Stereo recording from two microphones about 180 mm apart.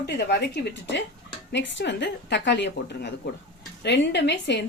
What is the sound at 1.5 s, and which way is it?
A woman's voice, 75° left (ahead or behind).